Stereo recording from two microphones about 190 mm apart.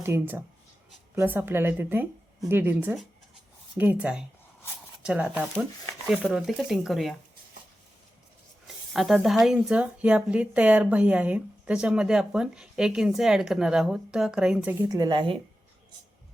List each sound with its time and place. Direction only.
0.0 s a woman's voice: 10° right (ahead or behind)
8.6 s speech: centre (ahead or behind)
14.8 s speech: 20° right (ahead or behind)